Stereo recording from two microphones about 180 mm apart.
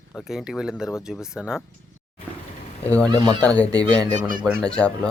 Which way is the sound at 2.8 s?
10° left (ahead or behind).